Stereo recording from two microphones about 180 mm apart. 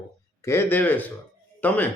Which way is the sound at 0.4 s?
15° left (ahead or behind).